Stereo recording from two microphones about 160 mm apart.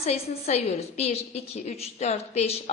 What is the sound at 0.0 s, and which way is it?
A woman's voice, 40° left (ahead or behind).